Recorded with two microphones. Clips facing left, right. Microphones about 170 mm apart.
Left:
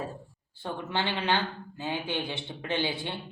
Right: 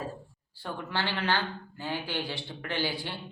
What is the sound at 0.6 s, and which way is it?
Speech, 20° left (ahead or behind).